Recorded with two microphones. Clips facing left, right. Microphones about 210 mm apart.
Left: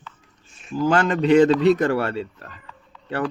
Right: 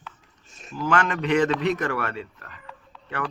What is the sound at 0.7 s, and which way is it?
Speech, 30° left (ahead or behind).